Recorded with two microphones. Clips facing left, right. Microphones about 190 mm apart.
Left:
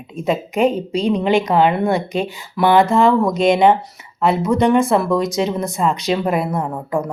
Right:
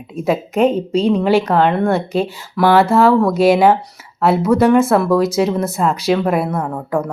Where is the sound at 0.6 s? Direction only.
15° left (ahead or behind).